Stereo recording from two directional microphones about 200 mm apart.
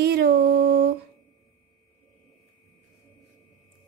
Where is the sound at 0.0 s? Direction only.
55° right (ahead or behind).